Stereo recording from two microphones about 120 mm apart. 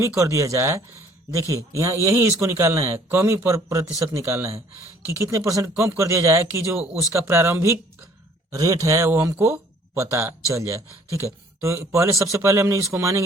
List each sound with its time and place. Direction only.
0.2 s a man's voice: 25° right (ahead or behind)